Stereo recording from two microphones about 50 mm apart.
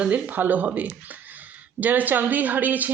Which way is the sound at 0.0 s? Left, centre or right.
Right.